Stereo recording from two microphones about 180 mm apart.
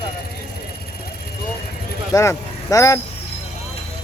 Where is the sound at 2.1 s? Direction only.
15° left (ahead or behind).